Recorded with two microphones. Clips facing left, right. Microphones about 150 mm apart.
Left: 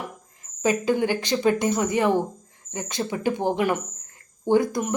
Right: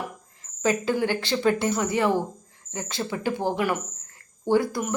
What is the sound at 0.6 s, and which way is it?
Speech, 15° left (ahead or behind).